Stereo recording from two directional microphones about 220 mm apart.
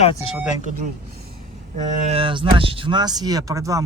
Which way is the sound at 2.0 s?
25° right (ahead or behind).